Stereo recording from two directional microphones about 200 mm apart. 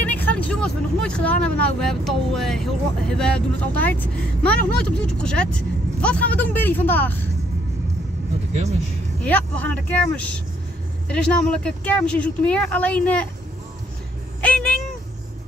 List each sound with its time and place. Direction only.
0.0 s speech: 10° left (ahead or behind)
8.5 s speech: 35° right (ahead or behind)
9.2 s speech: 10° left (ahead or behind)
14.4 s a sound: 5° left (ahead or behind)